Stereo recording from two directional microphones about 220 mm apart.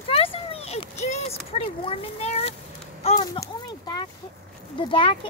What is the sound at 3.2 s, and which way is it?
Speech, 15° left (ahead or behind).